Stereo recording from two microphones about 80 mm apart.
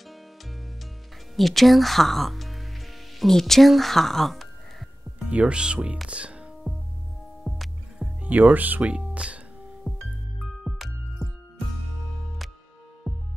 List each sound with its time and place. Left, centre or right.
1.3 s speech: centre
5.2 s speech: centre
6.0 s music: centre
7.4 s music: centre
8.2 s music: centre
10.4 s music: centre
13.0 s heart sounds: centre